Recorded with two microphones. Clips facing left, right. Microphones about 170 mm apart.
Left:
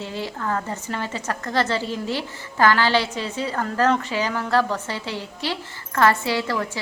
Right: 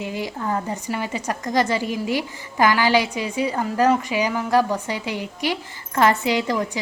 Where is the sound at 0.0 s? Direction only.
15° right (ahead or behind).